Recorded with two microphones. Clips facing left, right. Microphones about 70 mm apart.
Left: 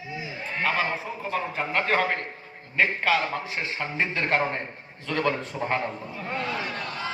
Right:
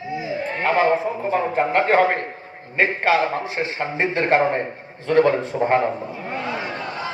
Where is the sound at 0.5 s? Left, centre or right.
Right.